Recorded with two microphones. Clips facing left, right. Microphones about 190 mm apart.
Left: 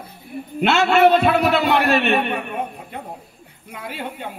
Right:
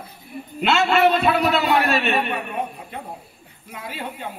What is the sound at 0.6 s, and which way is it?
A man's voice, 55° left (ahead or behind).